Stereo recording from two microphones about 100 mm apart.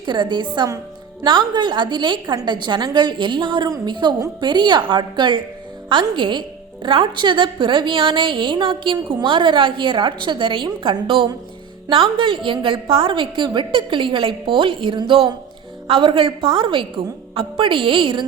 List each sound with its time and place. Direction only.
0.0 s a woman's voice: 50° right (ahead or behind)